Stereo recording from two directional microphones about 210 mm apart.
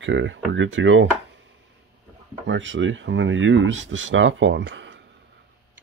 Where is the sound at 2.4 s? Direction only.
60° right (ahead or behind).